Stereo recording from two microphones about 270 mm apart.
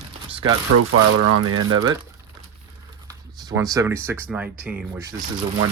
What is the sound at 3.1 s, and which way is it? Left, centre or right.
Speech, centre.